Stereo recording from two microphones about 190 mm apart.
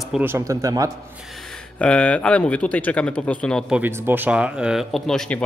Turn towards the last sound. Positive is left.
turn(degrees=5)  # may be behind; listen again after turning